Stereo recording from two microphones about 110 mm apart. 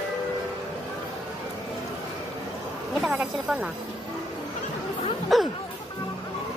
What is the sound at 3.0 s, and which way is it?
Speech, 5° right (ahead or behind).